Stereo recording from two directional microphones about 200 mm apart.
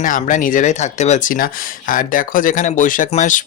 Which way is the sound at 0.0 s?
40° left (ahead or behind).